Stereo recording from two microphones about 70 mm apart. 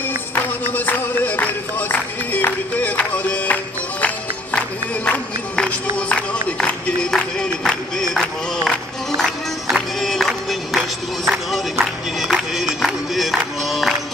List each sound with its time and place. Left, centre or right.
0.7 s music: left
5.0 s a sound: centre
6.6 s music: centre
11.8 s music: centre